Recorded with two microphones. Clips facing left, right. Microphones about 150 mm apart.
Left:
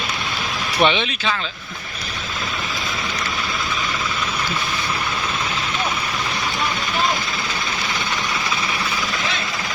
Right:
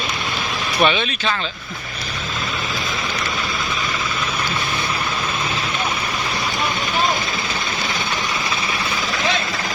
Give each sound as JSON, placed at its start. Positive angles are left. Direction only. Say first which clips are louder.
{"t": 0.8, "sound": "speech", "louder": "even", "side_deg": 20}